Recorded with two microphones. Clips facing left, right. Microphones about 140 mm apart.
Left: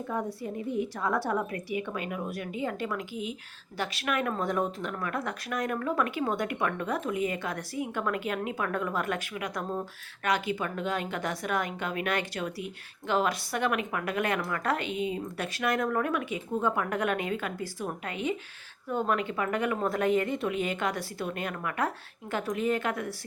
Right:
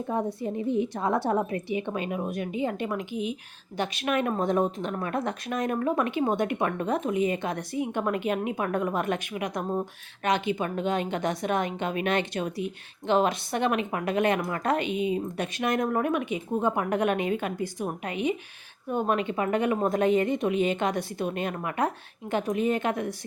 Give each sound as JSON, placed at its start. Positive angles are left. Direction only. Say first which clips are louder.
{"t": 0.1, "sound": "a woman's voice", "louder": "right 5 dB", "side_deg": -20}